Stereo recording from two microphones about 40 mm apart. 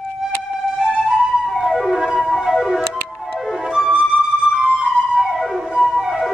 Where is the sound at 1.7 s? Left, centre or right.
Centre.